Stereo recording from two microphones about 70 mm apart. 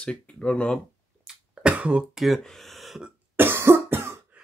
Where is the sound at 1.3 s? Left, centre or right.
Centre.